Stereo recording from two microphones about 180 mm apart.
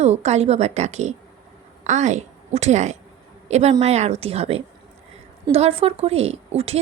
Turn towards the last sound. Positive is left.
turn(degrees=-35)  # may be behind; listen again after turning